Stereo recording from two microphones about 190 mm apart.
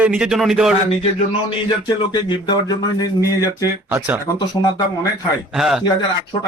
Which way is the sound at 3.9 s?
10° right (ahead or behind).